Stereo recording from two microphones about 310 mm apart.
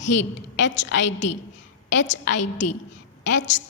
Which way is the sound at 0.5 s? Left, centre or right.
Left.